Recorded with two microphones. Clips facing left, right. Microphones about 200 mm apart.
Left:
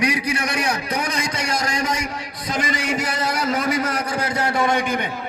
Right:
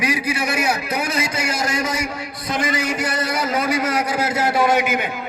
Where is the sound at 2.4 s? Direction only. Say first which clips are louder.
Right 2 dB; 55° right (ahead or behind).